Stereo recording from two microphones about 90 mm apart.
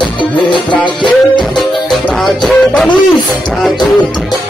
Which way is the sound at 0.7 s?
65° left (ahead or behind).